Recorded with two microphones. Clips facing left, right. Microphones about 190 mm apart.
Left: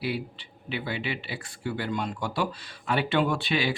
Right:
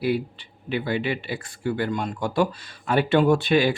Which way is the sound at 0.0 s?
45° right (ahead or behind).